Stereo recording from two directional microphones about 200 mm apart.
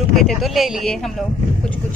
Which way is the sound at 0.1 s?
Centre (ahead or behind).